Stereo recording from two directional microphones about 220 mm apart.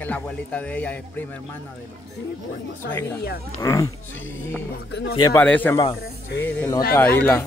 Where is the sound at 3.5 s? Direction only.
15° left (ahead or behind).